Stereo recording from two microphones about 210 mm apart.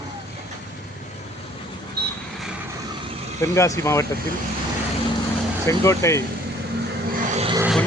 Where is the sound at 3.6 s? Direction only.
15° left (ahead or behind).